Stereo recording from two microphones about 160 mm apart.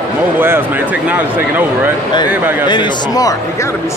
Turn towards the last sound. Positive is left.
turn(degrees=25)  # may be behind; listen again after turning